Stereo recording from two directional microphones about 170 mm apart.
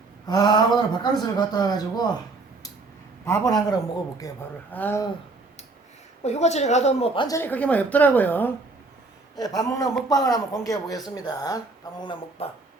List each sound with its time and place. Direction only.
0.3 s speech: 25° left (ahead or behind)
3.2 s a woman's voice: 20° left (ahead or behind)
6.2 s a woman's voice: 40° left (ahead or behind)
7.3 s a woman's voice: 10° left (ahead or behind)
9.4 s speech: 20° left (ahead or behind)
12.4 s a woman's voice: 35° left (ahead or behind)